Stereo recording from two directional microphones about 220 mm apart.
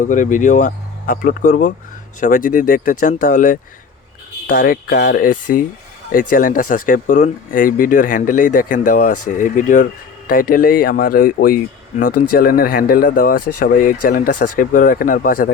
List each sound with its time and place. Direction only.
0.0 s speech: 35° left (ahead or behind)
12.1 s speech: 90° left
12.4 s speech: 40° left (ahead or behind)